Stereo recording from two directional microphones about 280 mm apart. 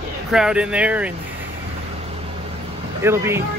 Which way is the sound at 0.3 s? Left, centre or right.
Centre.